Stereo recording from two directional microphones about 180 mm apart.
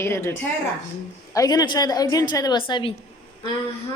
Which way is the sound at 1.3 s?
20° left (ahead or behind).